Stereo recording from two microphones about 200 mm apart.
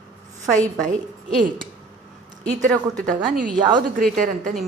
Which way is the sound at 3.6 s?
20° right (ahead or behind).